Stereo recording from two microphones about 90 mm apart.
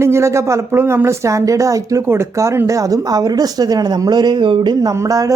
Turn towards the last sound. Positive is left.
turn(degrees=-40)  # may be behind; listen again after turning